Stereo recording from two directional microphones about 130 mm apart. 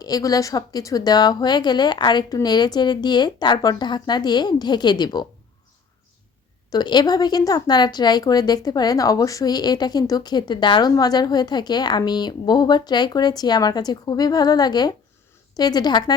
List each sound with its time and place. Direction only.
0.0 s speech: 30° left (ahead or behind)
6.7 s speech: 35° left (ahead or behind)